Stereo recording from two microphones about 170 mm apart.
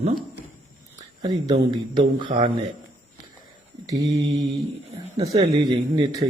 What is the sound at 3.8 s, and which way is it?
Speech, 20° right (ahead or behind).